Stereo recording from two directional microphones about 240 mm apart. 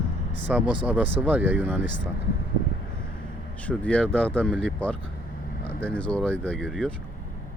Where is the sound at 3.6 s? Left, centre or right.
Centre.